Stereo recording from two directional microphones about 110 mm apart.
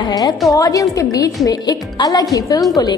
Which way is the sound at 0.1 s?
35° left (ahead or behind).